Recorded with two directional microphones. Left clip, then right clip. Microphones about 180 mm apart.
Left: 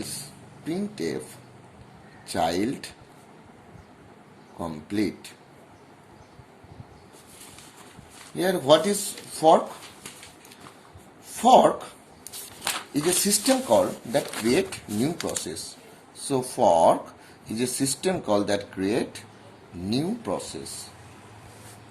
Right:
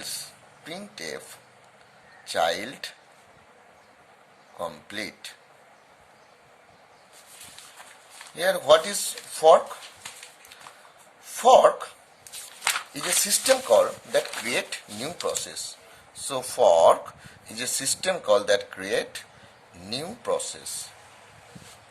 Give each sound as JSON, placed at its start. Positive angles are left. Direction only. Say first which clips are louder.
{"t": 0.6, "sound": "speech", "louder": "left 6 dB", "side_deg": -30}
{"t": 2.2, "sound": "speech", "louder": "even", "side_deg": -30}
{"t": 4.9, "sound": "speech", "louder": "left 6 dB", "side_deg": -35}
{"t": 7.8, "sound": "a sound", "louder": "right 1 dB", "side_deg": 0}
{"t": 8.4, "sound": "speech", "louder": "right 1 dB", "side_deg": -30}
{"t": 9.0, "sound": "speech", "louder": "right 1 dB", "side_deg": 0}
{"t": 11.3, "sound": "speech", "louder": "right 1 dB", "side_deg": 0}
{"t": 16.7, "sound": "speech", "louder": "right 1 dB", "side_deg": -35}
{"t": 17.7, "sound": "speech", "louder": "right 2 dB", "side_deg": 0}
{"t": 18.7, "sound": "speech", "louder": "left 1 dB", "side_deg": -35}
{"t": 19.8, "sound": "speech", "louder": "left 5 dB", "side_deg": 0}